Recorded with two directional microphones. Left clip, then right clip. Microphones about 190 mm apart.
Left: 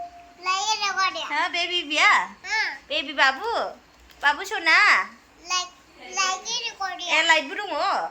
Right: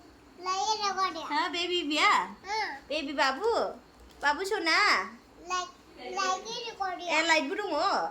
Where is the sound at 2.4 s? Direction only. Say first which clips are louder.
Left 7 dB; 35° right (ahead or behind).